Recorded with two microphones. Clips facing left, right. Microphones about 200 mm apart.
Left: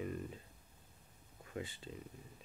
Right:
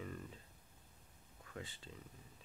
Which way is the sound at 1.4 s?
20° left (ahead or behind).